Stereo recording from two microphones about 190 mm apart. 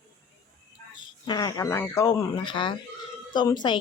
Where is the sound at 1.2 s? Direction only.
20° left (ahead or behind).